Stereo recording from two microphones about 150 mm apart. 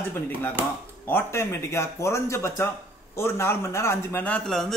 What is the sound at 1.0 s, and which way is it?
A man's voice, 15° left (ahead or behind).